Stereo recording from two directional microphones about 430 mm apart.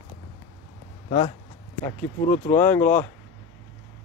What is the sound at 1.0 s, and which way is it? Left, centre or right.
Speech, centre.